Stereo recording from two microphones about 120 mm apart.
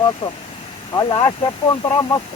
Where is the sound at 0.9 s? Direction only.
35° left (ahead or behind).